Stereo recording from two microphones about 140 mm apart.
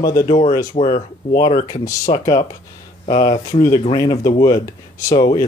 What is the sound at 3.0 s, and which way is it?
Speech, 60° left (ahead or behind).